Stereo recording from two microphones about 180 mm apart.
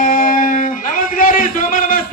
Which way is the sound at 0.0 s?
50° left (ahead or behind).